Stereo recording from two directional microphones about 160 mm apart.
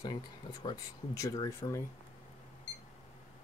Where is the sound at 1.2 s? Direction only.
20° left (ahead or behind).